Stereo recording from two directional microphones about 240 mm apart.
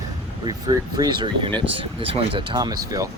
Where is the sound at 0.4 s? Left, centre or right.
Centre.